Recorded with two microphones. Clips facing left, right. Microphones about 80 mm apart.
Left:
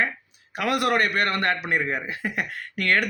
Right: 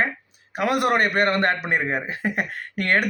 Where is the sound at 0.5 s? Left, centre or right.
Right.